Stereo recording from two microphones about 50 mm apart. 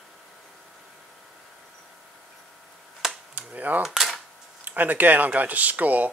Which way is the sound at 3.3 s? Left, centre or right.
Right.